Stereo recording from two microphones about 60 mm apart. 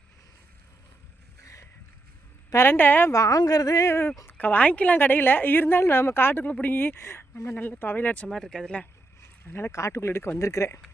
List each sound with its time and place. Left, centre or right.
1.4 s boat: left
2.6 s a woman's voice: left
3.1 s a woman's voice: left
3.8 s speech: left
4.4 s a woman's voice: left
4.9 s a woman's voice: left
6.4 s a woman's voice: left
7.6 s a woman's voice: left
8.3 s speech: centre
9.5 s a woman's voice: left
9.7 s speech: left